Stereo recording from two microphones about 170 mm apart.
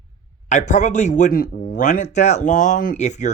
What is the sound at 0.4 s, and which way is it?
A man's voice, 45° left (ahead or behind).